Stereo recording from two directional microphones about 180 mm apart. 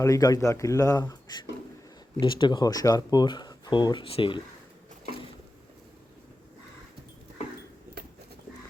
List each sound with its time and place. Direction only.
0.0 s speech: 20° left (ahead or behind)